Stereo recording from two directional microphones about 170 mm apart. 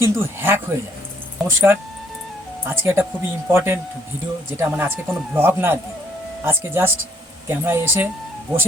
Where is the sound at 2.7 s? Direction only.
15° right (ahead or behind).